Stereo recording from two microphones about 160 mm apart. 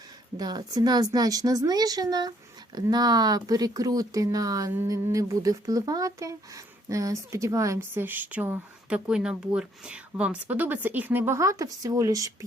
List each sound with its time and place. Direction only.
0.3 s speech: 25° right (ahead or behind)